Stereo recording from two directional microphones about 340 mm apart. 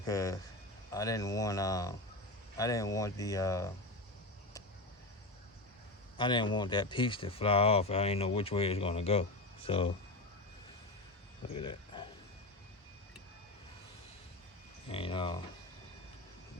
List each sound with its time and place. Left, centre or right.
0.0 s speech: centre
6.1 s speech: centre
11.5 s a sound: centre
14.8 s speech: centre